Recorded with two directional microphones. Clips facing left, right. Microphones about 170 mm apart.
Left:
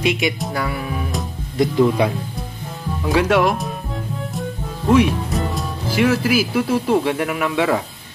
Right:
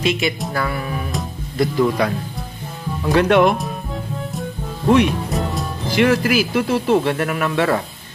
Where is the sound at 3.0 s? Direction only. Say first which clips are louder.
Right 2 dB; 5° left (ahead or behind).